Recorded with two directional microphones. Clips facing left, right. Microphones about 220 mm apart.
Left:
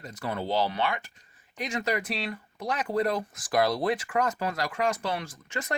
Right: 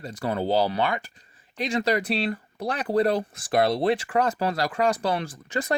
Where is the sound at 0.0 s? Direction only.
30° right (ahead or behind).